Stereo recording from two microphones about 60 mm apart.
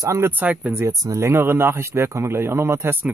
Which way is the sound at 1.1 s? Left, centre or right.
Right.